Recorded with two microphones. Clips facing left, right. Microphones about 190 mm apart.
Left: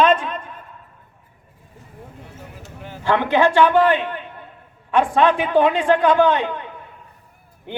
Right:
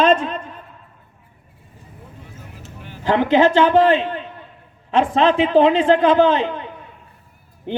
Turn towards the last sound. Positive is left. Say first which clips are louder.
# right 2 dB
turn(degrees=-25)  # may be behind; listen again after turning